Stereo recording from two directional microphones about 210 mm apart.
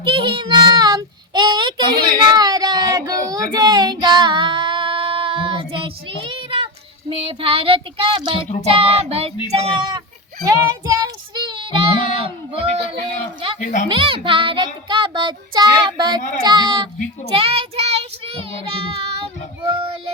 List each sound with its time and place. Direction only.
0.0 s child singing: 25° right (ahead or behind)
13.6 s speech: 35° left (ahead or behind)
13.8 s child singing: 25° right (ahead or behind)